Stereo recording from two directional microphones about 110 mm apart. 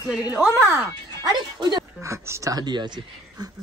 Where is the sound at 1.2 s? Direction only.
40° right (ahead or behind).